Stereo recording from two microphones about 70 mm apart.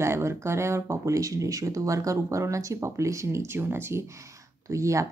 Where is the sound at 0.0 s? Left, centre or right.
Right.